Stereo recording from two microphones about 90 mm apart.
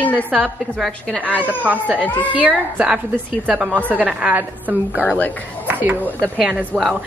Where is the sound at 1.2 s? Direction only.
20° right (ahead or behind).